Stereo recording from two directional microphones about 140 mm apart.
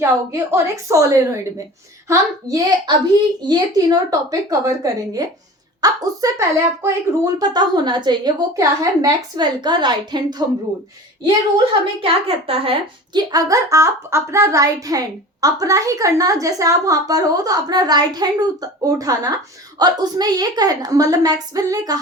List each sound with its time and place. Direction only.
0.0 s a child's voice: 20° right (ahead or behind)
11.5 s a woman's voice: 40° right (ahead or behind)
13.1 s a child's voice: 25° right (ahead or behind)